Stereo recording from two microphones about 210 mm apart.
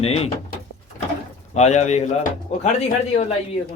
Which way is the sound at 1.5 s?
35° left (ahead or behind).